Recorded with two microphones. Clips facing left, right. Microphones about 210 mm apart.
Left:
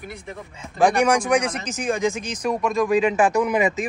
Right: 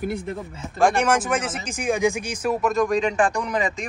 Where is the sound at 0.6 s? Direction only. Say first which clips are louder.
Left 2 dB; centre (ahead or behind).